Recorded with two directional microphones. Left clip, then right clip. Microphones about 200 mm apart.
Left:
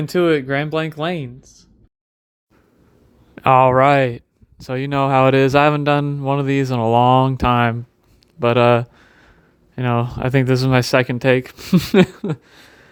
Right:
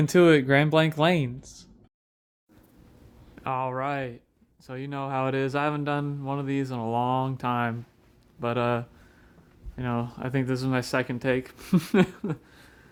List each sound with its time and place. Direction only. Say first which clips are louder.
0.1 s speech: left 2 dB; 10° right (ahead or behind)
3.3 s speech: left 17 dB; 50° left (ahead or behind)
8.4 s a sound: left 13 dB; 45° left (ahead or behind)
9.7 s speech: left 11 dB; 45° left (ahead or behind)